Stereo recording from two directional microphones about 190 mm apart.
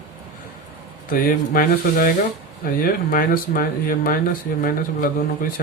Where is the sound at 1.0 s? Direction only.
50° left (ahead or behind).